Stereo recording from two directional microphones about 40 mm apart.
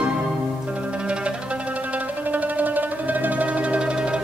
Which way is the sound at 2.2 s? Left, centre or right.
Right.